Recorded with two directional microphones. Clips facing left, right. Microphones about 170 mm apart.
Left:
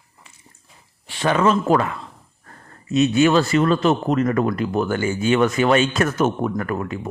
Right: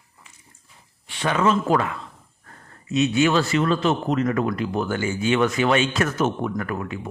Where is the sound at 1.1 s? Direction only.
40° left (ahead or behind).